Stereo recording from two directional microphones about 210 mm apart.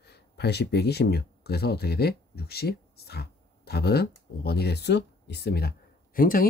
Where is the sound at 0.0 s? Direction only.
50° left (ahead or behind).